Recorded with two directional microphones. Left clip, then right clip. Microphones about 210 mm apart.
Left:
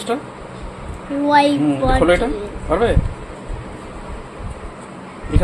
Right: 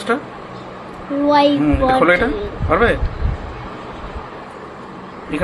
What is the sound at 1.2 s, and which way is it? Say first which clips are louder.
Speech: even; 20° left (ahead or behind).